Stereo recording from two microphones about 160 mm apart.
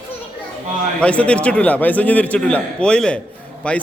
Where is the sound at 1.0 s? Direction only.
5° left (ahead or behind).